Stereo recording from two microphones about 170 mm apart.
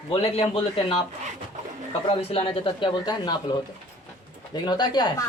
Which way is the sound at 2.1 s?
35° left (ahead or behind).